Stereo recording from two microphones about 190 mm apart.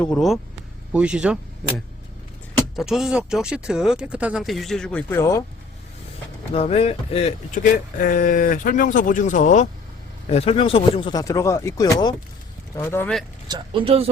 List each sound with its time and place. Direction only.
0.0 s speech: 5° left (ahead or behind)
2.7 s speech: centre (ahead or behind); by 5.4 s 15° left (ahead or behind)
6.5 s speech: 30° left (ahead or behind)
7.5 s speech: 45° left (ahead or behind); by 13.1 s 10° left (ahead or behind)
13.5 s speech: 25° right (ahead or behind)